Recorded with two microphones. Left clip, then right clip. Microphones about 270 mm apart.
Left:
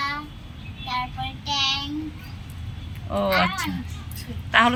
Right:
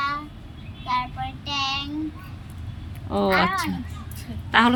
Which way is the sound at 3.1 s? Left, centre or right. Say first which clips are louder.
Right 1 dB; centre.